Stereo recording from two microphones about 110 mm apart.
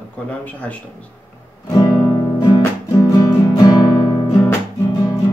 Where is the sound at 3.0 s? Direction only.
35° left (ahead or behind).